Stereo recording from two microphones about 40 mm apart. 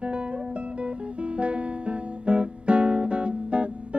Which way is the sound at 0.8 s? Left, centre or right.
Right.